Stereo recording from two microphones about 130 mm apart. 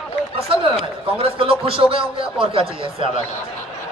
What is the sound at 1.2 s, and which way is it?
A man's voice, 45° right (ahead or behind).